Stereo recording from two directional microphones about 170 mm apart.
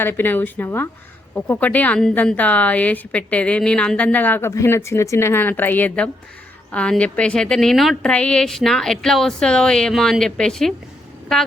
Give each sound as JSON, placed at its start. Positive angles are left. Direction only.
{"t": 0.0, "sound": "a woman's voice", "side_deg": 10}